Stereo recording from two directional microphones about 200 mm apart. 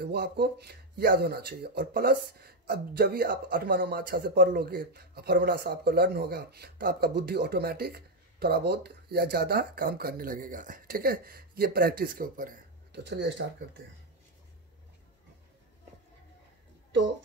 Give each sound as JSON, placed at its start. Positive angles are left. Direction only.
{"t": 0.0, "sound": "speech", "side_deg": -55}
{"t": 13.0, "sound": "speech", "side_deg": -60}